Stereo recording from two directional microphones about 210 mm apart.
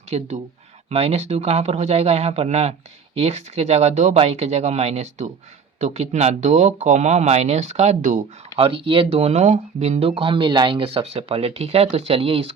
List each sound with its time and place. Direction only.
0.1 s speech: 30° right (ahead or behind)